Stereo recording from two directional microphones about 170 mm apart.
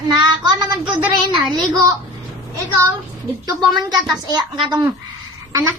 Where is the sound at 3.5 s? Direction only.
25° right (ahead or behind).